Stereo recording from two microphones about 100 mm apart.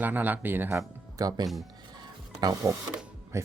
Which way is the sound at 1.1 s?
40° right (ahead or behind).